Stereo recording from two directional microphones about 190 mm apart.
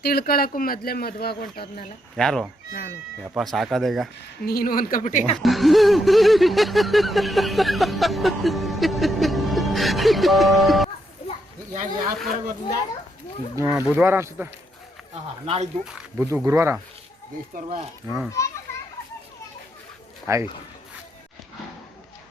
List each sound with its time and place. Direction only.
0.0 s speech: 55° left (ahead or behind)
2.1 s speech: centre (ahead or behind)
4.4 s speech: 50° left (ahead or behind)
5.4 s snicker: centre (ahead or behind)
11.7 s speech: 40° right (ahead or behind)
13.6 s speech: 10° right (ahead or behind)
15.4 s speech: 35° right (ahead or behind)
15.8 s speech: 5° right (ahead or behind)
16.3 s speech: 15° right (ahead or behind)
18.4 s a child's voice: 15° left (ahead or behind)
20.3 s speech: 15° right (ahead or behind)